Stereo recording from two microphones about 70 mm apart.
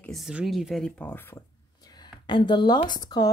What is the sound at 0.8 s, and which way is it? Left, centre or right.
Speech, left.